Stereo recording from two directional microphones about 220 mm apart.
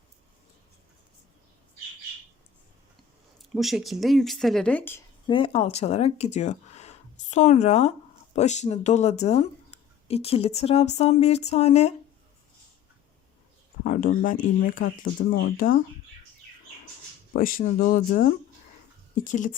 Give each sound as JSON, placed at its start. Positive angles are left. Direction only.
{"t": 3.5, "sound": "speech", "side_deg": 0}
{"t": 5.3, "sound": "speech", "side_deg": 25}
{"t": 13.8, "sound": "speech", "side_deg": 40}
{"t": 17.3, "sound": "speech", "side_deg": 40}